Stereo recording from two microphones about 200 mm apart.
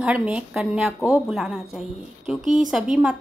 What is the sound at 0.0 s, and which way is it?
A woman's voice, 5° right (ahead or behind).